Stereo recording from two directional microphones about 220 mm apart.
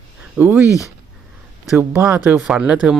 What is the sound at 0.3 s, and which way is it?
Speech, 10° right (ahead or behind).